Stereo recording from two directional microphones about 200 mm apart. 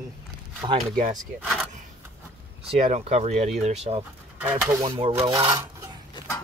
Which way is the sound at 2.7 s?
30° right (ahead or behind).